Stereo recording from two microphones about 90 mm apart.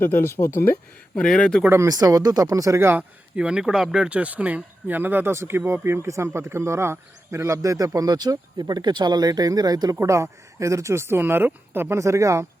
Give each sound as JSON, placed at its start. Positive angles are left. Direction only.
{"t": 0.0, "sound": "speech", "side_deg": 25}
{"t": 1.1, "sound": "speech", "side_deg": 10}
{"t": 1.7, "sound": "speech", "side_deg": -35}
{"t": 3.3, "sound": "speech", "side_deg": -10}
{"t": 10.0, "sound": "speech", "side_deg": -35}